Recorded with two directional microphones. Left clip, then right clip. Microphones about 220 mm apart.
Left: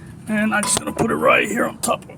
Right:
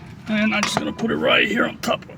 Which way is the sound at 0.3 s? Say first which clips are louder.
Even; 5° right (ahead or behind).